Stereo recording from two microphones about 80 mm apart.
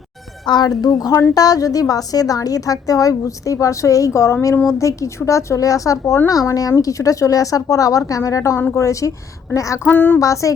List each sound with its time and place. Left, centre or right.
0.4 s a woman's voice: left
9.9 s a sound: left
10.2 s a woman's voice: left